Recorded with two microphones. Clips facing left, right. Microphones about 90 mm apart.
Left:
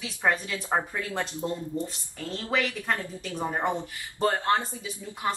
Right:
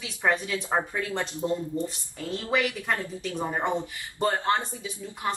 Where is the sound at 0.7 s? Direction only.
Centre (ahead or behind).